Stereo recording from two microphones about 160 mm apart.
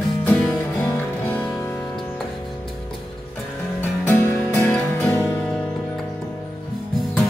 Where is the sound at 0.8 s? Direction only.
10° left (ahead or behind).